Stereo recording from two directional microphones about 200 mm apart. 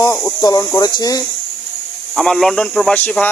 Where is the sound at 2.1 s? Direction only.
Centre (ahead or behind).